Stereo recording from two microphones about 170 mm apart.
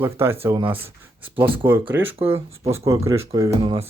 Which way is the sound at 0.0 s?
15° right (ahead or behind).